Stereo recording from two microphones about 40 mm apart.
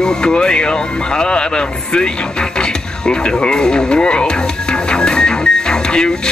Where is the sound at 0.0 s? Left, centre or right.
Left.